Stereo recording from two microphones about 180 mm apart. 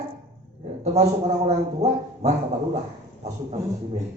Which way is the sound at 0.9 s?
35° right (ahead or behind).